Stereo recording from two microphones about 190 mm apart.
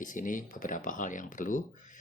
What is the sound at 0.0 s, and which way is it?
A man's voice, 45° left (ahead or behind).